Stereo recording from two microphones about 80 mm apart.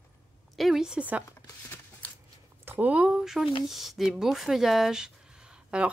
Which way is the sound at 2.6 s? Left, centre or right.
Right.